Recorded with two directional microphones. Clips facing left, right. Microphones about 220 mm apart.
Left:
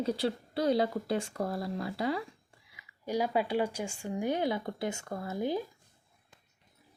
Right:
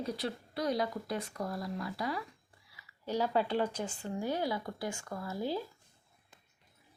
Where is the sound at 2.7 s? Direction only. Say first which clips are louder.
Left 2 dB; 10° left (ahead or behind).